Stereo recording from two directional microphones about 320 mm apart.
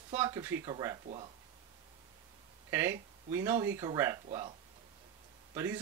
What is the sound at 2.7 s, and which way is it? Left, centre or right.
Speech, centre.